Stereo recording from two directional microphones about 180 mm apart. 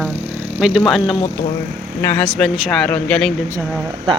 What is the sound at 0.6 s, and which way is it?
Speech, centre (ahead or behind).